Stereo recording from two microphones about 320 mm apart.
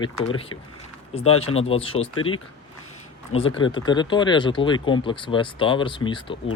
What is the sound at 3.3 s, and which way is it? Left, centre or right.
Speech, centre.